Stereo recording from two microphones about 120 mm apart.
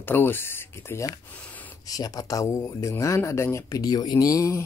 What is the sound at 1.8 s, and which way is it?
Speech, 30° left (ahead or behind).